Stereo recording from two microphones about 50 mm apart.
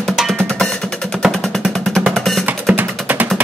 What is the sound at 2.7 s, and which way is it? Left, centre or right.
Music, right.